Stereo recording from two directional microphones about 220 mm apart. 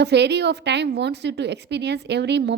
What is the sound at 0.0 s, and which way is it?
A woman's voice, 50° right (ahead or behind).